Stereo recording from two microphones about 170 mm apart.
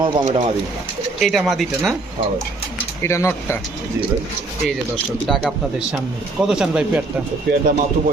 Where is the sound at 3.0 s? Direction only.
15° left (ahead or behind).